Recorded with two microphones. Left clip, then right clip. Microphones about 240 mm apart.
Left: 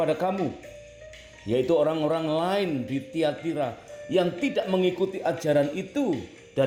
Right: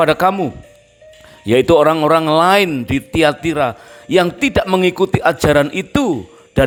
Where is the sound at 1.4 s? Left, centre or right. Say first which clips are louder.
Right 12 dB; right.